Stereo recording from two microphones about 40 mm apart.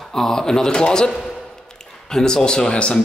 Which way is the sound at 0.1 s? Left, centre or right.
Centre.